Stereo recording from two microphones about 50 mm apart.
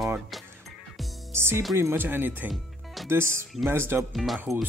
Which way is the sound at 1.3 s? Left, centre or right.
Right.